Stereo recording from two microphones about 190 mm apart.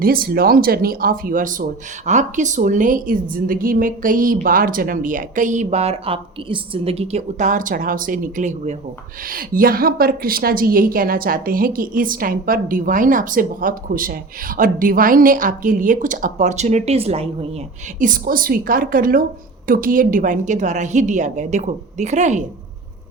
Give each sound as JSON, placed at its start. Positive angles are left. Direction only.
{"t": 0.0, "sound": "a woman's voice", "side_deg": -50}
{"t": 18.0, "sound": "a woman's voice", "side_deg": -45}